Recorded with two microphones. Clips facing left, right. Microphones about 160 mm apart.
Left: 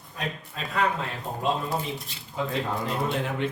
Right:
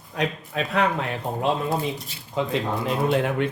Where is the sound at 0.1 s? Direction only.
80° right.